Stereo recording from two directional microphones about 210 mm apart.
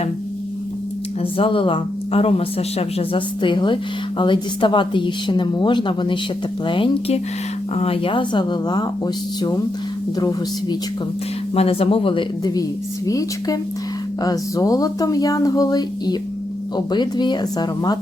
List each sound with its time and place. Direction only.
1.2 s speech: 25° left (ahead or behind)